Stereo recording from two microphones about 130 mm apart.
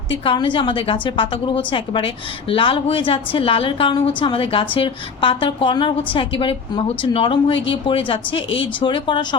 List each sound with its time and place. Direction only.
0.1 s a woman's voice: 40° left (ahead or behind)